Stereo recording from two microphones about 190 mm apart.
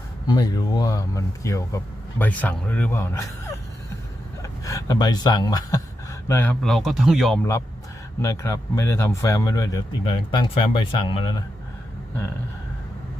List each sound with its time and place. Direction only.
0.3 s speech: 20° left (ahead or behind); by 7.3 s centre (ahead or behind)
8.2 s speech: 15° left (ahead or behind)